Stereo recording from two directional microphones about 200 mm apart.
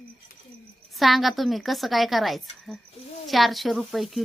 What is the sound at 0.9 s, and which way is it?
A woman's voice, centre (ahead or behind).